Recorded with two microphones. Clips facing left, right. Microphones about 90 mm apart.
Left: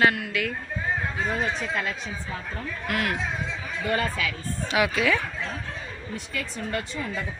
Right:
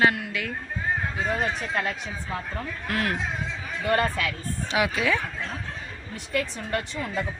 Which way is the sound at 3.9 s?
50° right (ahead or behind).